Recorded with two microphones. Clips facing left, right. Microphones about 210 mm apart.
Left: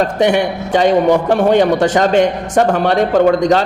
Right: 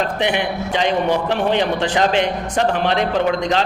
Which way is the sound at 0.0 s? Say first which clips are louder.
Left 7 dB; 45° left (ahead or behind).